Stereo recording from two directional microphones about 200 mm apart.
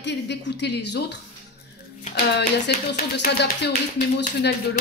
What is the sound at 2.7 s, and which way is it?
Speech, 50° left (ahead or behind).